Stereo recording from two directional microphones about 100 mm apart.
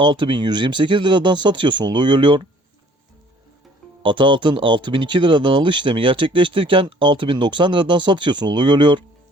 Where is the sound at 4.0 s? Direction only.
55° right (ahead or behind).